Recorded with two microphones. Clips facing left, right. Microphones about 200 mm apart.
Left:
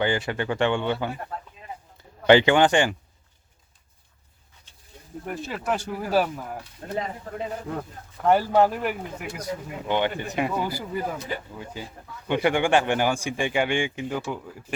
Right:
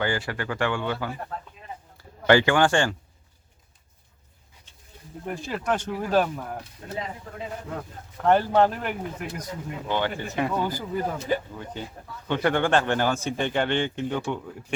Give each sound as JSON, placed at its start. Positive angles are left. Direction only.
{"t": 0.0, "sound": "a man's voice", "side_deg": 20}
{"t": 5.2, "sound": "speech", "side_deg": 0}
{"t": 6.8, "sound": "speech", "side_deg": 40}
{"t": 8.2, "sound": "speech", "side_deg": 10}